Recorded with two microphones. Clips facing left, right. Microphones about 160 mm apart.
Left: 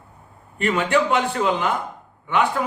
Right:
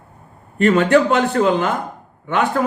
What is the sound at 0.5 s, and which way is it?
A man's voice, 45° right (ahead or behind).